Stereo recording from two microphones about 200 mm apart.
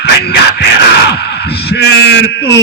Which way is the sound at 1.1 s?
55° left (ahead or behind).